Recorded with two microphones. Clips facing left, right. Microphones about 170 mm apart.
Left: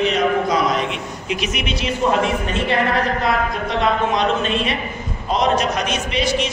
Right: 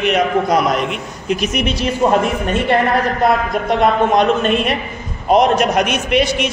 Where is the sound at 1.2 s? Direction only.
45° right (ahead or behind).